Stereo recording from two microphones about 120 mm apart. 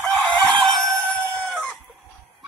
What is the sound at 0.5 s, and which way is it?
Chicken, 10° left (ahead or behind).